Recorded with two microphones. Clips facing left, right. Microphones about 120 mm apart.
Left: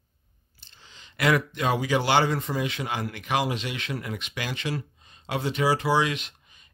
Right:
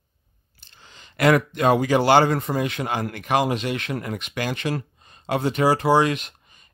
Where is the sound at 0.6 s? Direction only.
55° right (ahead or behind).